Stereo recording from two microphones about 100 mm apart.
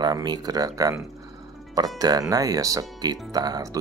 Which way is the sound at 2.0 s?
40° right (ahead or behind).